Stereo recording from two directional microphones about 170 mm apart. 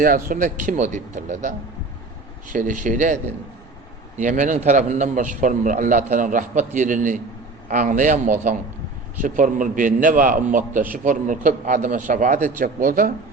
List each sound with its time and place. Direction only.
0.0 s a man's voice: 55° right (ahead or behind)
4.2 s a man's voice: 45° right (ahead or behind)